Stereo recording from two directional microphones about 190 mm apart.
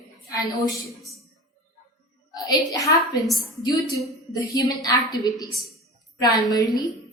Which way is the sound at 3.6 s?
15° left (ahead or behind).